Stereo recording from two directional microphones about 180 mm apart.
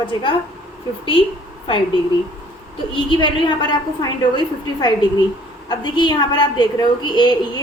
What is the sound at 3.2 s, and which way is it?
A woman's voice, 25° left (ahead or behind).